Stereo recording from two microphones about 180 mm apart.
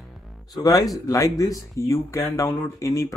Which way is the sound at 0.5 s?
20° left (ahead or behind).